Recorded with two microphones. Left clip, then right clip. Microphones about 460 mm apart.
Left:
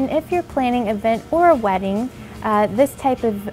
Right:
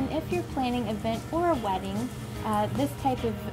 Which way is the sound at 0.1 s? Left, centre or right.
Left.